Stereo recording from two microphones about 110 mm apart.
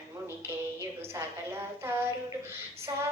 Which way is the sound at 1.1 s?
25° right (ahead or behind).